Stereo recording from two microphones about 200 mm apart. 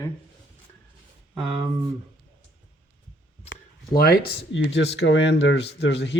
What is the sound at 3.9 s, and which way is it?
Speech, 50° left (ahead or behind).